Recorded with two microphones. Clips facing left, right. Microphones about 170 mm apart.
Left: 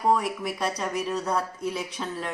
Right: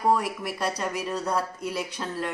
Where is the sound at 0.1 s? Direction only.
Centre (ahead or behind).